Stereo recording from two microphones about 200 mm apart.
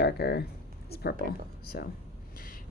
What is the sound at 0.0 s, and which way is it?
A woman's voice, 55° left (ahead or behind).